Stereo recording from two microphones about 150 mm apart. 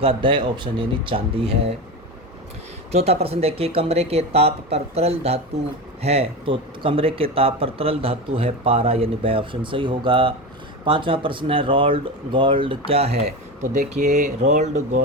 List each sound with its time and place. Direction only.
0.0 s speech: 35° right (ahead or behind)
2.9 s speech: 45° right (ahead or behind)